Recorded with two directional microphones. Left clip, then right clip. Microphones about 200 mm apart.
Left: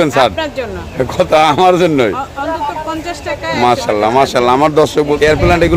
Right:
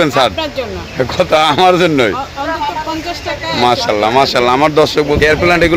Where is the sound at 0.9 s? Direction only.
5° left (ahead or behind).